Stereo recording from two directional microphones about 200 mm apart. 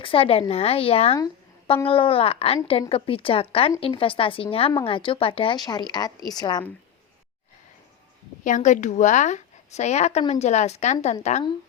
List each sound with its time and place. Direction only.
0.0 s a woman's voice: 25° left (ahead or behind)
8.4 s a woman's voice: 40° left (ahead or behind)